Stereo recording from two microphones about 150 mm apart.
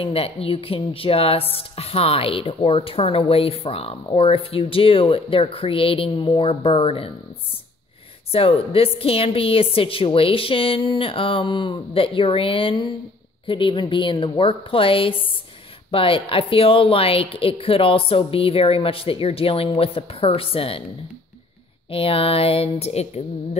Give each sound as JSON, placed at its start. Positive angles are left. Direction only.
{"t": 0.0, "sound": "a woman's voice", "side_deg": 40}
{"t": 8.3, "sound": "a woman's voice", "side_deg": 40}
{"t": 21.9, "sound": "a woman's voice", "side_deg": 40}